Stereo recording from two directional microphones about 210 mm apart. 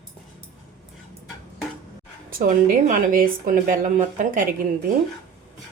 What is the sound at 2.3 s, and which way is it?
Speech, 40° right (ahead or behind).